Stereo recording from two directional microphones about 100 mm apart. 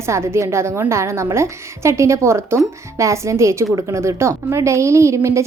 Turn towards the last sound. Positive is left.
turn(degrees=-30)  # may be behind; listen again after turning